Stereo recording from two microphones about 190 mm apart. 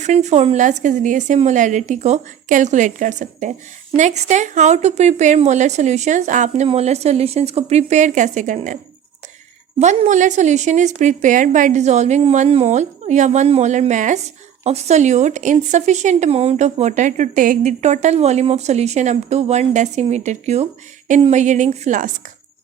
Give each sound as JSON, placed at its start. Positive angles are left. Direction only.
{"t": 0.0, "sound": "speech", "side_deg": -35}